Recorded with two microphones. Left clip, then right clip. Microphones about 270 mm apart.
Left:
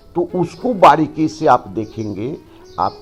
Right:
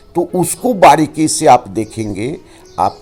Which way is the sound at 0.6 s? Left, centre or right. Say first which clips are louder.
Right 2 dB; right.